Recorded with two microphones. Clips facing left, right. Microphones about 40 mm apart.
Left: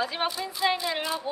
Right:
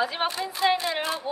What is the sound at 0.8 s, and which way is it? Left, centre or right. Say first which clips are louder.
Speech: right 1 dB; right.